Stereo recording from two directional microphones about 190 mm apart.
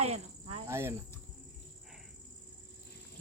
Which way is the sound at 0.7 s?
15° right (ahead or behind).